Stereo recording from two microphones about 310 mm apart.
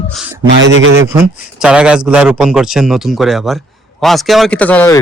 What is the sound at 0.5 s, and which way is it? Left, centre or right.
Speech, right.